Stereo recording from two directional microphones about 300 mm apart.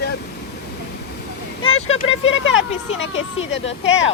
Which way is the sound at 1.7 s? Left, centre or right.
Left.